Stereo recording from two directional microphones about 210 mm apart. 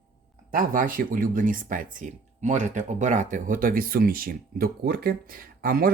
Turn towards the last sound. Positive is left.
turn(degrees=-45)  # may be behind; listen again after turning